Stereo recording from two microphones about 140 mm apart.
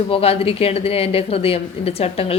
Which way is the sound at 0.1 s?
45° left (ahead or behind).